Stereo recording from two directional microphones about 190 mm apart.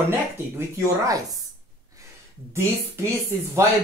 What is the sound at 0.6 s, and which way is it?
Speech, 15° right (ahead or behind).